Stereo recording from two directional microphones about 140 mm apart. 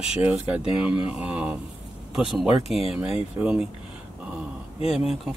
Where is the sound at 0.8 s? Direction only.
40° left (ahead or behind).